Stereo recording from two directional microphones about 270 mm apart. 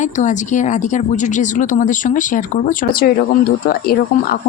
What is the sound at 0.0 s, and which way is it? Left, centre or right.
Speech, left.